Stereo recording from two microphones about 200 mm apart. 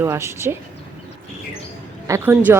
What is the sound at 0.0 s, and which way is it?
Speech, 15° right (ahead or behind).